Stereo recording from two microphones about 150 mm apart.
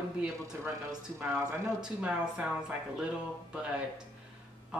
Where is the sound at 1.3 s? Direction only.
20° right (ahead or behind).